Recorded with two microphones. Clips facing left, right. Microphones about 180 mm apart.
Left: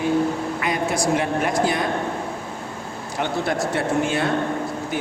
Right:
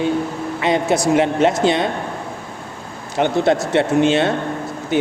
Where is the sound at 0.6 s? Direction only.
25° right (ahead or behind).